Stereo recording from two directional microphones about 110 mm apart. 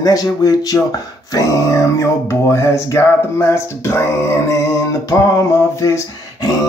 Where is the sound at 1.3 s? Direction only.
30° left (ahead or behind).